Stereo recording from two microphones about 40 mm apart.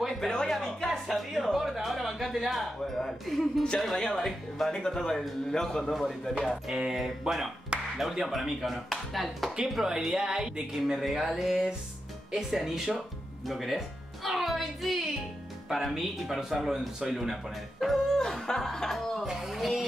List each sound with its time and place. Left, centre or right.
0.3 s a sound: centre
1.6 s speech: centre
3.8 s speech: centre
6.7 s speech: centre
7.0 s chopping: centre
9.8 s speech: centre
10.8 s chopping: centre
12.3 s speech: centre
15.9 s speech: centre
17.1 s chopping: centre
17.8 s music: centre
18.9 s a sound: centre
19.2 s a sound: centre
19.6 s a sound: centre